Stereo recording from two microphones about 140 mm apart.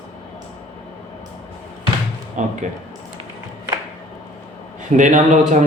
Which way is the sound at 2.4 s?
60° right (ahead or behind).